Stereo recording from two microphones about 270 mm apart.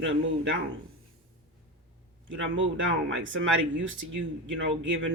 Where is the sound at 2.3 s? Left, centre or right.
Right.